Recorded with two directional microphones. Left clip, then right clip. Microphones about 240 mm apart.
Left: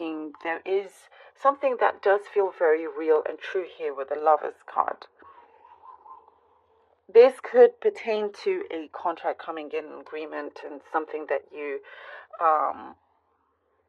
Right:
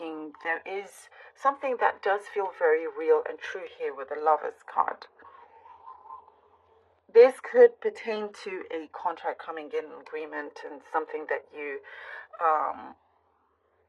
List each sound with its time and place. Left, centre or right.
0.0 s speech: left
7.1 s speech: left